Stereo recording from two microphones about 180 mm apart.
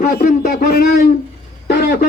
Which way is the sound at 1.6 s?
65° left (ahead or behind).